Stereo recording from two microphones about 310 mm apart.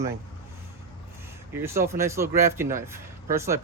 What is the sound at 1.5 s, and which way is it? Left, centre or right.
Speech, centre.